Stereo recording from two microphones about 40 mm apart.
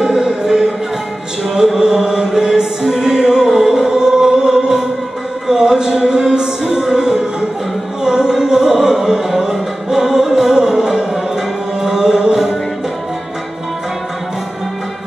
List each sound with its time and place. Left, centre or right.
0.0 s music: centre
1.8 s music: centre